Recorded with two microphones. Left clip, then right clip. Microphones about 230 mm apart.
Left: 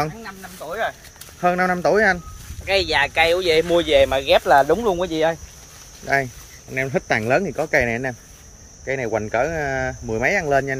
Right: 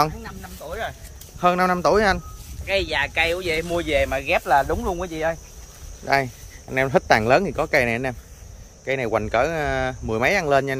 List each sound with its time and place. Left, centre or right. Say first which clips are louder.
0.0 s speech: right 3 dB; centre
2.6 s speech: left 4 dB; left
6.0 s speech: even; centre